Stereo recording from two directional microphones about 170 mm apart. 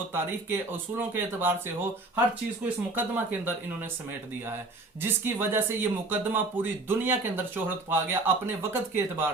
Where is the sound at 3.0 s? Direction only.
10° right (ahead or behind).